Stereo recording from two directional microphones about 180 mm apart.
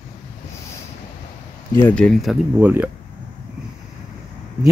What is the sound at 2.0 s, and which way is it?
Speech, 5° left (ahead or behind).